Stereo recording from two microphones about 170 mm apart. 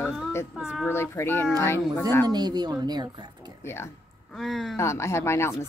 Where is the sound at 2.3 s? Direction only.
25° right (ahead or behind).